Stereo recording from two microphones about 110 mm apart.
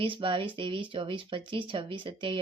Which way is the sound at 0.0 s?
55° right (ahead or behind).